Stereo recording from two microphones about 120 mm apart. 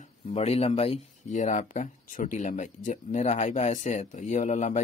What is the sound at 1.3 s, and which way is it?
A man's voice, 90° left.